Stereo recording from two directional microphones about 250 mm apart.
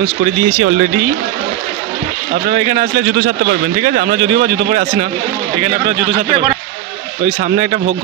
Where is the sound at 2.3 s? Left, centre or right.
Right.